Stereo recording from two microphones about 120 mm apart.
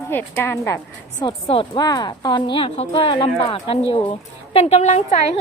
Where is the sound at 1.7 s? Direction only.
35° left (ahead or behind); by 3.3 s 50° left (ahead or behind).